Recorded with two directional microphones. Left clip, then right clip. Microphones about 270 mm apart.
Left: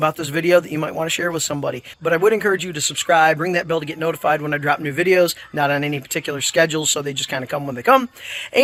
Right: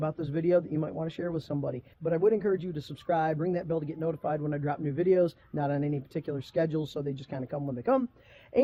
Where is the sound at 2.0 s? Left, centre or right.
Centre.